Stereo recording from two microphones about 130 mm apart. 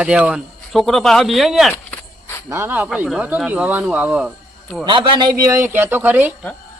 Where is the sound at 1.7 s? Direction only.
20° left (ahead or behind).